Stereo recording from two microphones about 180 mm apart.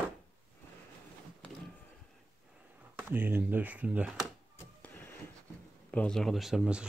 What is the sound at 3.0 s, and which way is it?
Speech, 10° right (ahead or behind).